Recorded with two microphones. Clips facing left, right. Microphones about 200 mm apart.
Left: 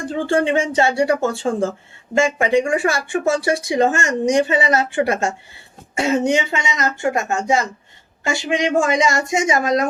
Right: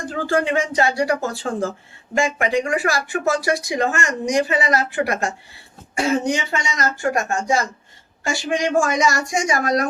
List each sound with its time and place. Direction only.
0.1 s speech: 30° left (ahead or behind)